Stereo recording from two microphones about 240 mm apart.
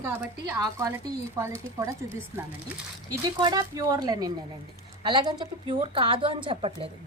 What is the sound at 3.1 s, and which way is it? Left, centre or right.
A woman's voice, centre.